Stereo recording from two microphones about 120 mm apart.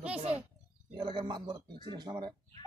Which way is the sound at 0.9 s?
40° right (ahead or behind).